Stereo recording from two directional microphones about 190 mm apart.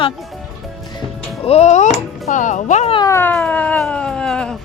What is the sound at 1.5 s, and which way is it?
Speech, 35° left (ahead or behind).